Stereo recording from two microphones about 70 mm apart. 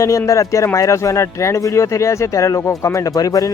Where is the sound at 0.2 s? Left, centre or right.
Left.